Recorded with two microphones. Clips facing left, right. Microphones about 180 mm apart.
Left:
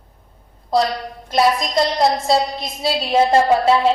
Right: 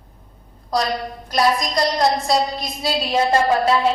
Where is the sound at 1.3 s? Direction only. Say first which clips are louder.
Left 2 dB; 25° left (ahead or behind).